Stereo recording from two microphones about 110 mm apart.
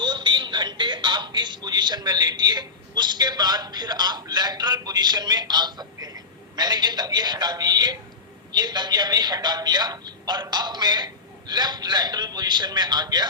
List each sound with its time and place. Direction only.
0.0 s a man's voice: 45° right (ahead or behind)